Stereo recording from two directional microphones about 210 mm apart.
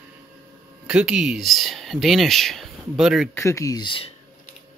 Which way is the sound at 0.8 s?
5° right (ahead or behind).